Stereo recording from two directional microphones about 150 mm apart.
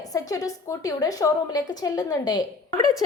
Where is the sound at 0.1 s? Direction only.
25° left (ahead or behind).